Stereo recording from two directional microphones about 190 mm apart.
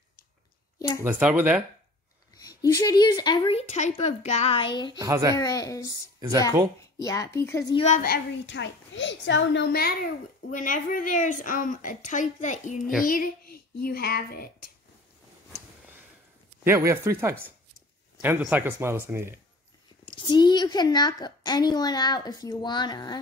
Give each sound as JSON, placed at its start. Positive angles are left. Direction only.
{"t": 0.7, "sound": "speech", "side_deg": 15}
{"t": 1.0, "sound": "speech", "side_deg": -10}
{"t": 2.6, "sound": "a woman's voice", "side_deg": 20}
{"t": 4.9, "sound": "speech", "side_deg": -20}
{"t": 5.3, "sound": "speech", "side_deg": 20}
{"t": 6.1, "sound": "speech", "side_deg": -20}
{"t": 6.8, "sound": "speech", "side_deg": 20}
{"t": 7.7, "sound": "a woman's voice", "side_deg": 35}
{"t": 8.0, "sound": "a woman's voice", "side_deg": 60}
{"t": 10.5, "sound": "a woman's voice", "side_deg": 45}
{"t": 16.6, "sound": "speech", "side_deg": -15}
{"t": 20.2, "sound": "a woman's voice", "side_deg": 25}